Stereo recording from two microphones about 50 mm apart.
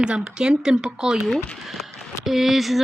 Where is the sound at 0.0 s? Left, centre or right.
Centre.